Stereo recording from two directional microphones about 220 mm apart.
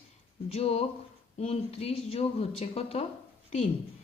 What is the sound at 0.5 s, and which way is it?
Speech, 25° left (ahead or behind).